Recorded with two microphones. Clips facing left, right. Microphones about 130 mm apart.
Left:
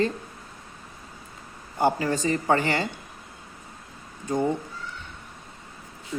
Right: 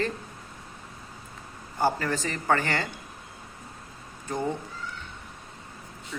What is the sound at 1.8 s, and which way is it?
Speech, 15° left (ahead or behind).